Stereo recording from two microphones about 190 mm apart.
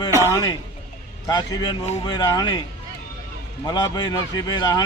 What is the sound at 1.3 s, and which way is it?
A man's voice, 20° left (ahead or behind).